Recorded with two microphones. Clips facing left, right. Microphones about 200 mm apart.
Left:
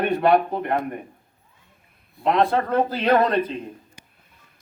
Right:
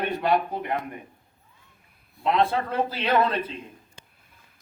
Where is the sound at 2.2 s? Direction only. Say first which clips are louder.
Left 3 dB; 50° left (ahead or behind).